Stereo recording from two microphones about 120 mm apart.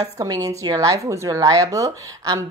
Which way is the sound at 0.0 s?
30° right (ahead or behind).